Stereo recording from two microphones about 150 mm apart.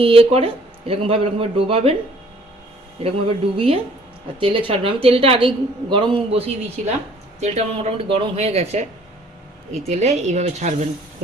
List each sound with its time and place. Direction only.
0.0 s a woman's voice: 40° right (ahead or behind)
3.0 s a woman's voice: 40° right (ahead or behind)